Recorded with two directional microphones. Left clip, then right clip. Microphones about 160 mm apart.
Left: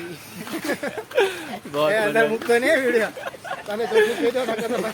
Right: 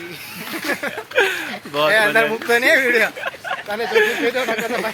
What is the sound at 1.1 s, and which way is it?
Speech, 10° right (ahead or behind).